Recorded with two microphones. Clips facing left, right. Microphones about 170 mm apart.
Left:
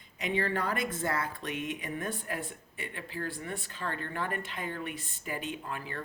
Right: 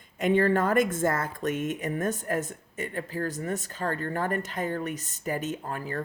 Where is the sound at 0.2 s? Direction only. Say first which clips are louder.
Right 9 dB; 50° right (ahead or behind).